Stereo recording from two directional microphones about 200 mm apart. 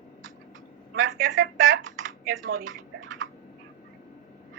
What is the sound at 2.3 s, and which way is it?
Typing, 80° right.